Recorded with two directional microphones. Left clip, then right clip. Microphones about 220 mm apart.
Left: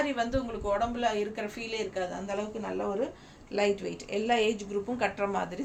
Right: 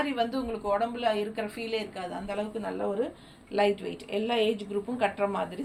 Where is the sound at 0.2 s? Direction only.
15° left (ahead or behind).